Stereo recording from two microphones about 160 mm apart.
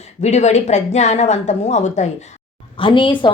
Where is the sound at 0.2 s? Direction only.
45° left (ahead or behind).